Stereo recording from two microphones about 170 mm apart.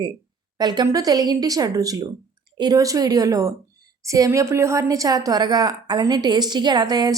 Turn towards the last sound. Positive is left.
turn(degrees=-25)  # may be behind; listen again after turning